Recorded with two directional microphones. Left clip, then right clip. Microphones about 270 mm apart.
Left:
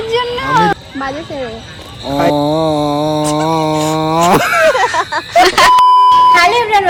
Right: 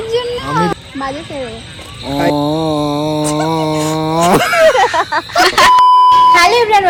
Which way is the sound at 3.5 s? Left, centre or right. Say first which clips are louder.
Left 2 dB; centre.